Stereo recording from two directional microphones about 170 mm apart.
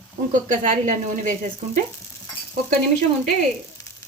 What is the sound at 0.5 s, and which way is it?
Speech, 50° right (ahead or behind).